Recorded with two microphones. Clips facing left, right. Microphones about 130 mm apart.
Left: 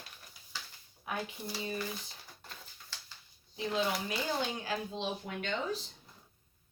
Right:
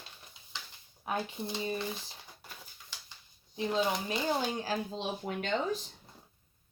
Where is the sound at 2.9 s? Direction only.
15° right (ahead or behind).